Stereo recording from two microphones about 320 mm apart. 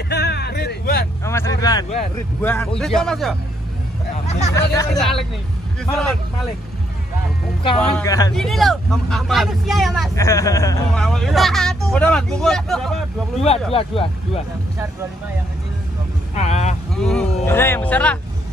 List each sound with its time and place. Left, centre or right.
0.1 s a sound: left
1.2 s speech: centre
2.4 s speech: centre
4.6 s speech: centre
7.6 s speech: centre
13.7 s speech: centre
16.3 s vehicle: left
16.9 s speech: centre